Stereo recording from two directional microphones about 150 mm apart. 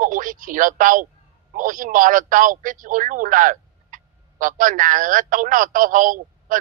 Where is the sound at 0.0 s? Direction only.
65° right (ahead or behind).